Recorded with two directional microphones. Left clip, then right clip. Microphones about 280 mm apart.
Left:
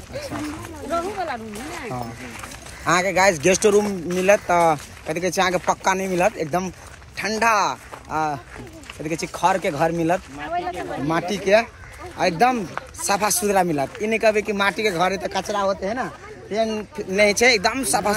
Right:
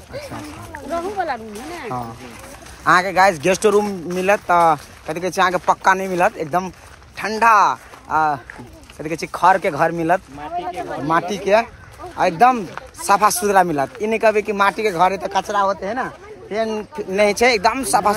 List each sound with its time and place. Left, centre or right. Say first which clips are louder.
0.8 s speech: right 2 dB; right
2.8 s speech: right 4 dB; centre
10.6 s speech: right 2 dB; right
11.1 s speech: right 3 dB; centre